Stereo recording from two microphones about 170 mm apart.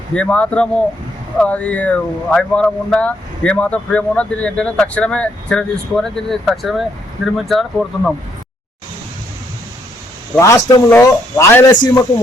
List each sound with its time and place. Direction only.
0.1 s speech: 5° left (ahead or behind)
10.3 s speech: 15° left (ahead or behind)